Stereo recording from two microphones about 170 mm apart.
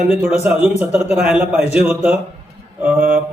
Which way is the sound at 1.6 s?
40° left (ahead or behind).